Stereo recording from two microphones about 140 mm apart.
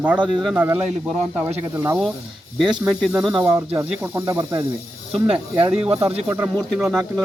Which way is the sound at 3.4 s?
15° right (ahead or behind).